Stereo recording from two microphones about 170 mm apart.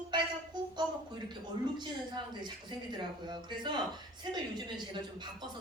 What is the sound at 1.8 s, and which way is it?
Speech, 25° right (ahead or behind).